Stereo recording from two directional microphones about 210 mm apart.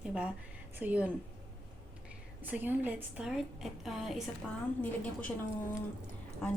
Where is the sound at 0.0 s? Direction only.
5° right (ahead or behind).